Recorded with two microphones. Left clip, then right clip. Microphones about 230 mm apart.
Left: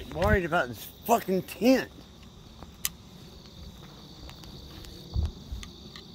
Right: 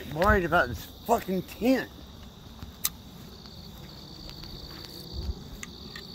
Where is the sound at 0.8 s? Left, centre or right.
Left.